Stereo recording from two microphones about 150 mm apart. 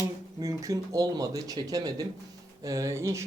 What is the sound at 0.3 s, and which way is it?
Speech, 20° right (ahead or behind).